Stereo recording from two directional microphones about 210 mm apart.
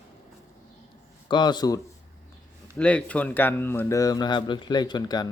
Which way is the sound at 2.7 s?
5° left (ahead or behind).